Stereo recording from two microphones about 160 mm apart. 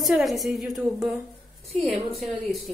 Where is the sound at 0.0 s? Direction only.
Centre (ahead or behind).